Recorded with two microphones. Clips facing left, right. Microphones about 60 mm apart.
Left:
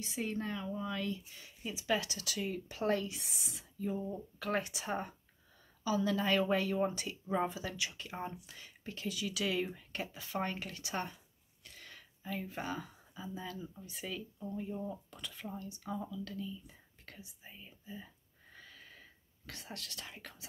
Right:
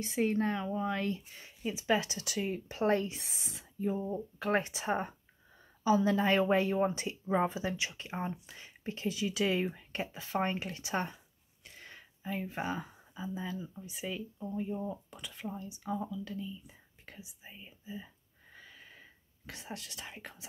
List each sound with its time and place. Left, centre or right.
0.0 s speech: right
1.6 s speech: right